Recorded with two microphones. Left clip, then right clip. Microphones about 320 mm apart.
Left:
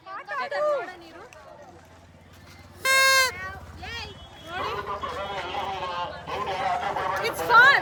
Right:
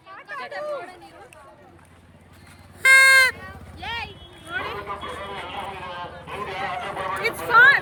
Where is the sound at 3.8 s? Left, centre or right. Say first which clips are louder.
Right 8 dB; right.